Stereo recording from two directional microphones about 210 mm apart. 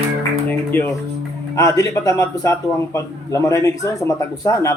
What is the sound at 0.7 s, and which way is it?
Speech, 10° left (ahead or behind).